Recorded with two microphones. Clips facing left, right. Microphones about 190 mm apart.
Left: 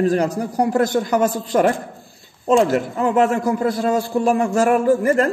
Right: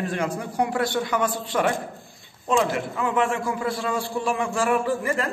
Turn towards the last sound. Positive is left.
turn(degrees=45)  # may be behind; listen again after turning